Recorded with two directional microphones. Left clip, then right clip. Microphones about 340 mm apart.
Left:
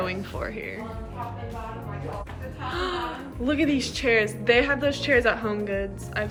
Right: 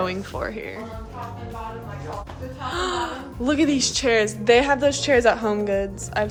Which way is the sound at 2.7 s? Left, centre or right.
Centre.